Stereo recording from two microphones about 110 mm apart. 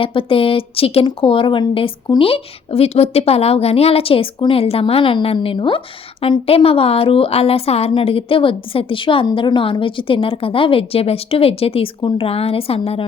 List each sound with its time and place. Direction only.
0.0 s a woman's voice: 55° left (ahead or behind)